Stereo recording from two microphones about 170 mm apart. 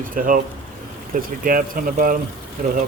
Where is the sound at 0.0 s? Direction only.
55° right (ahead or behind).